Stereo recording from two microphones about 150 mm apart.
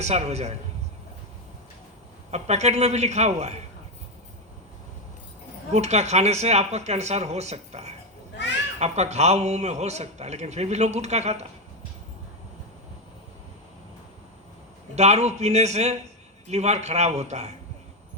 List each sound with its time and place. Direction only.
0.0 s a man's voice: 45° right (ahead or behind)
2.3 s a man's voice: 45° right (ahead or behind)
5.7 s a man's voice: 45° right (ahead or behind)
14.9 s a man's voice: 45° right (ahead or behind)